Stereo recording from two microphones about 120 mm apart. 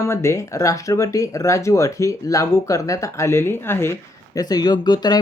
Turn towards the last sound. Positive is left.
turn(degrees=35)  # may be behind; listen again after turning